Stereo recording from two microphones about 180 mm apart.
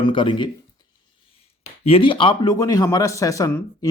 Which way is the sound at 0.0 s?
30° left (ahead or behind).